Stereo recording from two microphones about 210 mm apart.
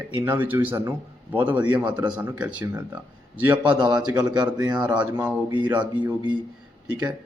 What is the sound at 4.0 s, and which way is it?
Speech, 20° right (ahead or behind).